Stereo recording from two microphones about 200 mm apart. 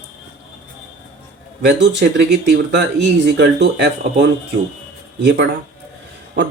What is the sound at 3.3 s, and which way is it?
Speech, 60° right (ahead or behind).